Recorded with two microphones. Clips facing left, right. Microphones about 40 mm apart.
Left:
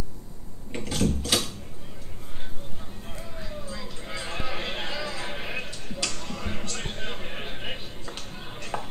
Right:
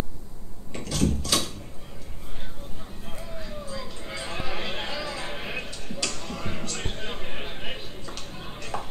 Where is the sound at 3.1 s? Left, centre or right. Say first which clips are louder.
Right 1 dB; centre.